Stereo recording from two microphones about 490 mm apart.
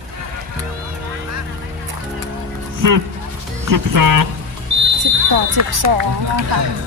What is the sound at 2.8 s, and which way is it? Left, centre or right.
Speech, right.